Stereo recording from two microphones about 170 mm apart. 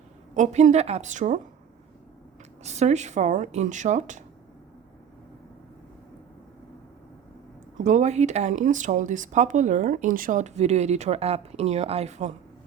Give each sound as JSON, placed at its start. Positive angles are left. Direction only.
{"t": 0.3, "sound": "speech", "side_deg": -45}
{"t": 2.6, "sound": "speech", "side_deg": -40}
{"t": 7.9, "sound": "speech", "side_deg": -45}